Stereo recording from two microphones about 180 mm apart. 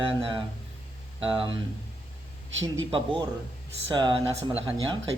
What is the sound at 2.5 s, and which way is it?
Speech, 90° right.